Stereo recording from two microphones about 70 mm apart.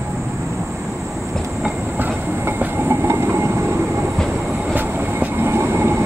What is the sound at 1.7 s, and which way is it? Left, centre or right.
Train, right.